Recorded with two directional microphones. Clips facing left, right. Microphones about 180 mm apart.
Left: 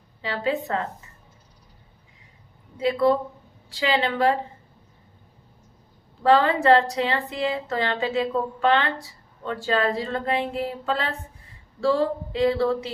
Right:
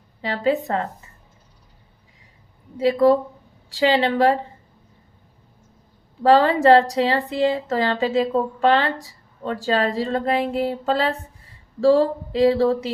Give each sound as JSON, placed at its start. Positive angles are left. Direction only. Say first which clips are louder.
{"t": 0.2, "sound": "a woman's voice", "louder": "right 5 dB", "side_deg": -40}
{"t": 2.7, "sound": "a woman's voice", "louder": "right 4 dB", "side_deg": -35}
{"t": 6.2, "sound": "a woman's voice", "louder": "right 3 dB", "side_deg": -35}